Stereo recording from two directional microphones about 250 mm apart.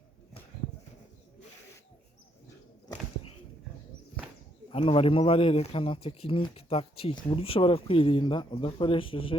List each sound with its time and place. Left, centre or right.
4.7 s speech: left